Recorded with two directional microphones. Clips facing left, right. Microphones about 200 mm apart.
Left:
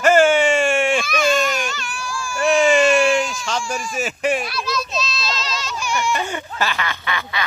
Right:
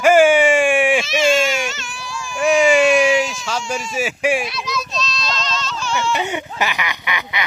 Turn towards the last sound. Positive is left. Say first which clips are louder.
# even
turn(degrees=-20)  # may be behind; listen again after turning